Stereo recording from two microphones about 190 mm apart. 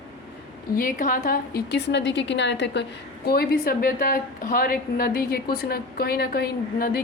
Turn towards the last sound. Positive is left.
turn(degrees=50)  # may be behind; listen again after turning